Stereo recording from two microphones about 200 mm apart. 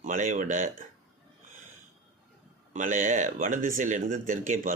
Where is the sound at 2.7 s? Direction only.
40° right (ahead or behind).